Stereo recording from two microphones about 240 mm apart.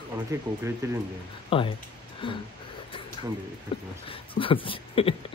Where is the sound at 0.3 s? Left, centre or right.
Centre.